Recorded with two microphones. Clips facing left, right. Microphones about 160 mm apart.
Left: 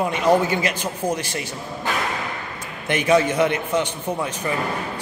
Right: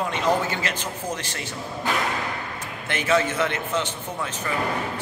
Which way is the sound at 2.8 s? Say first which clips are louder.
Left 5 dB; 15° left (ahead or behind).